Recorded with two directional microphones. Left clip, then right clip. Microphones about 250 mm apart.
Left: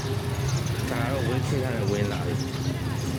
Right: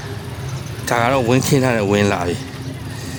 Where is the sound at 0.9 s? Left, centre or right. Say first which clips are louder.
Right 14 dB; right.